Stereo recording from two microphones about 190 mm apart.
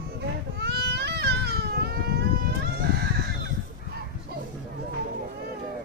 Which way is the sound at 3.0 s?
55° right (ahead or behind).